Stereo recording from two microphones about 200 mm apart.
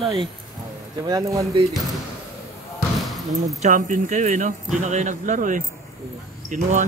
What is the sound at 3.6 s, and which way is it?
Speech, 40° right (ahead or behind).